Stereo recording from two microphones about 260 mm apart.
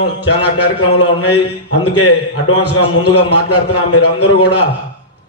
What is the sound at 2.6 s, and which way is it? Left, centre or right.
A man's voice, left.